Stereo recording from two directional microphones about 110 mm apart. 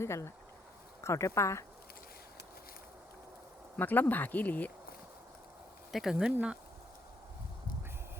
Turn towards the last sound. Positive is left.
turn(degrees=-10)  # may be behind; listen again after turning